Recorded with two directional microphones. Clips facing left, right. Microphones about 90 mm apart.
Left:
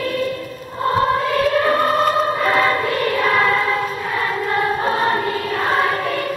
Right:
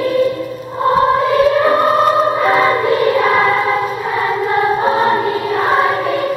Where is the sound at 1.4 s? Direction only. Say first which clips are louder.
Right 4 dB; 15° right (ahead or behind).